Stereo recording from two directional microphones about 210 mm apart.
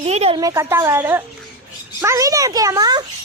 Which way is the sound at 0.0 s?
30° right (ahead or behind).